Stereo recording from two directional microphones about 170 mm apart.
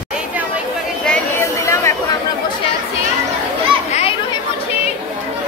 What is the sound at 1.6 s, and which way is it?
Chatter, 15° left (ahead or behind).